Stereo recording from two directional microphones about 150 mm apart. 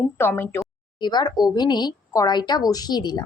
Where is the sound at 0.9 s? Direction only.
30° left (ahead or behind).